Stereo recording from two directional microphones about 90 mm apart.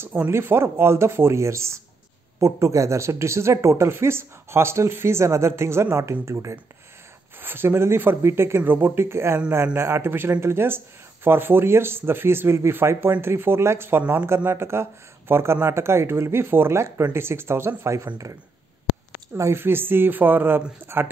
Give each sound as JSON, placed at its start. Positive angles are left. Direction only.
{"t": 0.0, "sound": "speech", "side_deg": -25}
{"t": 19.3, "sound": "speech", "side_deg": -30}